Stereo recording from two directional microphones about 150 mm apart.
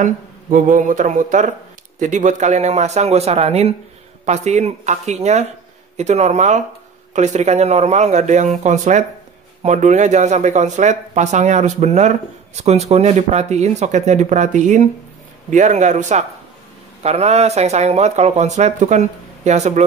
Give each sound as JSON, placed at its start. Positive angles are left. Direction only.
{"t": 0.0, "sound": "speech", "side_deg": -60}